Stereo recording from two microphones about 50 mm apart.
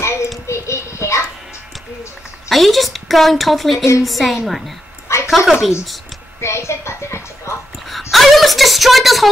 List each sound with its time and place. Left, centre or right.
0.0 s a sound: left
0.5 s music: left
2.5 s a woman's voice: centre
5.0 s a sound: left
5.3 s a woman's voice: centre
6.4 s music: left
8.1 s a woman's voice: centre